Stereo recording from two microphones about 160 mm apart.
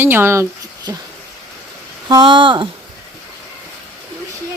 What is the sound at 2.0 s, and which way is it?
Speech, 25° right (ahead or behind).